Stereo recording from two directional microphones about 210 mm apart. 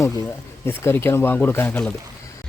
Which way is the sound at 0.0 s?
15° left (ahead or behind).